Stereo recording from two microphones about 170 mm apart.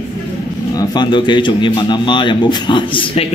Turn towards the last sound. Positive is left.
turn(degrees=30)  # may be behind; listen again after turning